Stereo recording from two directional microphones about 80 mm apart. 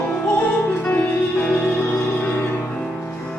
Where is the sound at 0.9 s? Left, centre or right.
Left.